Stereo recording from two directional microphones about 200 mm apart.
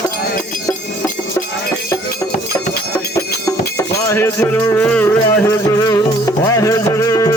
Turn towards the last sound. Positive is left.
turn(degrees=15)  # may be behind; listen again after turning